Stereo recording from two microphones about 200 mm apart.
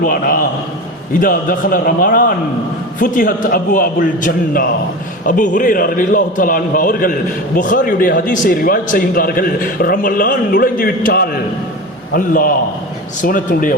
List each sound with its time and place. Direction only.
0.0 s speech: 45° left (ahead or behind)